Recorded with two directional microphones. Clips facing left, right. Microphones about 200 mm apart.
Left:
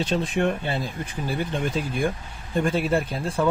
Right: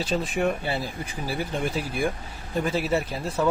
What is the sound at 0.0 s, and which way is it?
Speech, 5° right (ahead or behind).